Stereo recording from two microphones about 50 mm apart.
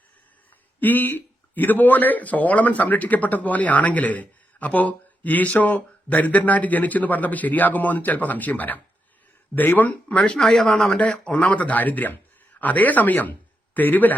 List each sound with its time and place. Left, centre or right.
0.8 s speech: left
10.3 s speech: centre
10.8 s speech: left